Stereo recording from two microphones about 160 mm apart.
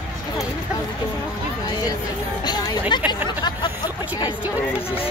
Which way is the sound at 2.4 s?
25° left (ahead or behind).